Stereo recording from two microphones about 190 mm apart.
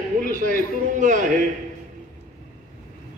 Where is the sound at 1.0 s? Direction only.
40° right (ahead or behind).